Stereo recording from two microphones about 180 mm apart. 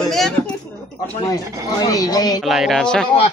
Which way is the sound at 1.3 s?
20° left (ahead or behind).